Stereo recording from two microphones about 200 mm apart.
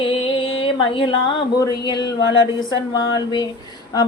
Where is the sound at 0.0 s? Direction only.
25° left (ahead or behind).